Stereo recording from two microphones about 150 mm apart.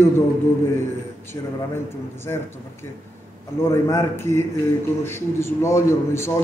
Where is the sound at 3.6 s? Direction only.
15° left (ahead or behind).